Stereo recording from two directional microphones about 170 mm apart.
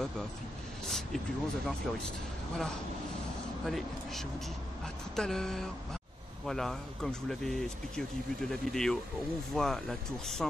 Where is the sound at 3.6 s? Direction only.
Centre (ahead or behind).